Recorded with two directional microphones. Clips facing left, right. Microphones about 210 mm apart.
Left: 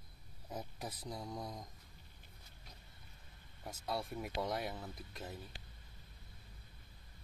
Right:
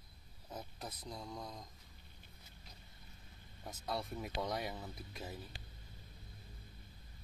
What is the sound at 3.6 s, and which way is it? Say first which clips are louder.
Speech: left 1 dB; 5° left (ahead or behind).